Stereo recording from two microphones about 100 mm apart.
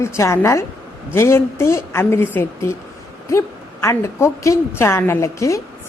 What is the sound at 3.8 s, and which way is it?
A woman's voice, 30° left (ahead or behind).